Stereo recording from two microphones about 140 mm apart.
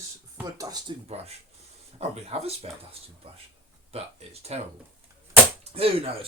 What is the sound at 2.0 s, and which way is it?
Speech, 45° right (ahead or behind).